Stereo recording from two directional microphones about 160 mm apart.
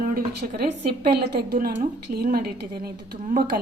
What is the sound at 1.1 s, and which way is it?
A woman's voice, 90° right.